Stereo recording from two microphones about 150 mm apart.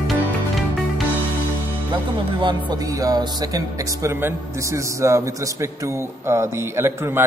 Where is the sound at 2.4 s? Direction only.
25° right (ahead or behind).